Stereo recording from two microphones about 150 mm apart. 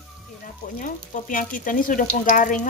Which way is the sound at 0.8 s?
60° left (ahead or behind).